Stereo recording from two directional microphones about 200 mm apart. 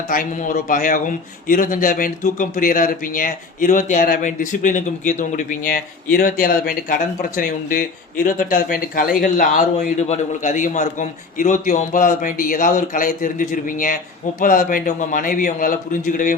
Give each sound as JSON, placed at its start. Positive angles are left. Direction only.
{"t": 0.1, "sound": "a man's voice", "side_deg": 40}